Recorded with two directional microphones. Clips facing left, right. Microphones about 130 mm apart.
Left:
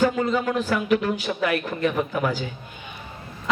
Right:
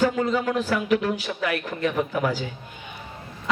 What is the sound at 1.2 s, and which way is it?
Speech, 40° left (ahead or behind).